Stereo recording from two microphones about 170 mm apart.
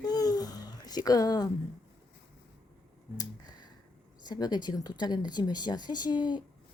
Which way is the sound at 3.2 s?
25° left (ahead or behind).